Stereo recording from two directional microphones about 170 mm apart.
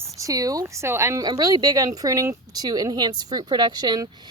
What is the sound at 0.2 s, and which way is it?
Speech, 20° right (ahead or behind).